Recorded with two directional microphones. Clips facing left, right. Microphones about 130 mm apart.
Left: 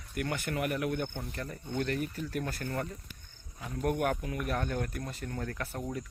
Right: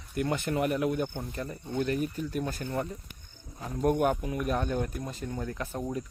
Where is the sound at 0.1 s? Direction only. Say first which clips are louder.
Right 5 dB; 25° right (ahead or behind).